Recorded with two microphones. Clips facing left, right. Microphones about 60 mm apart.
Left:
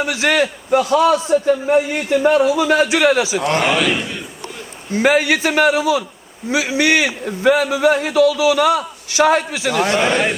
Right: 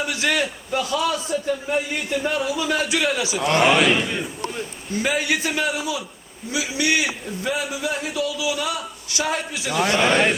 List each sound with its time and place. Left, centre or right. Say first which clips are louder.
0.0 s a man's voice: left 6 dB; left
3.6 s a man's voice: even; centre
5.0 s a man's voice: left 8 dB; left
6.6 s a man's voice: left 6 dB; left
10.0 s a man's voice: left 1 dB; centre